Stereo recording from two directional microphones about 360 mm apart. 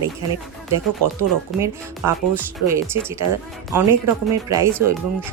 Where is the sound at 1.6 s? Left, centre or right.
Centre.